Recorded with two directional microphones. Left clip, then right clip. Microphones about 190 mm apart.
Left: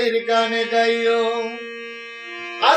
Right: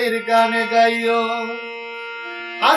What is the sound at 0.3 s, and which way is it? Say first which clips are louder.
Music: right 3 dB; 15° right (ahead or behind).